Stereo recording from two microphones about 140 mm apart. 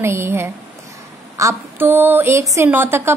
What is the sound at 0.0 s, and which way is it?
A woman's voice, 20° right (ahead or behind).